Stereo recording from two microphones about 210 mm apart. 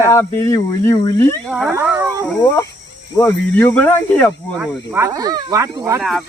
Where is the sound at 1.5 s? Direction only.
5° right (ahead or behind).